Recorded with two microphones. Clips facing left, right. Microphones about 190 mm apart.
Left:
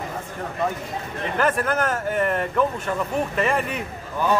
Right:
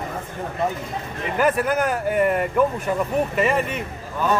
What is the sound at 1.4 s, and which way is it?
Speech, 10° right (ahead or behind).